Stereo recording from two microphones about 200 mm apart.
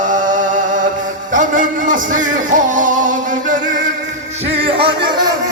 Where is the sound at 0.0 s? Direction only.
40° right (ahead or behind).